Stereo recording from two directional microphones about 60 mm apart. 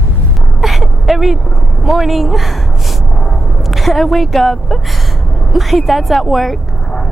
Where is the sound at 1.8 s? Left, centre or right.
Centre.